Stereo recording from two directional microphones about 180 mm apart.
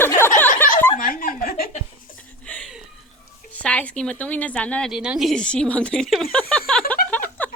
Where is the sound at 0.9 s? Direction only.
50° left (ahead or behind).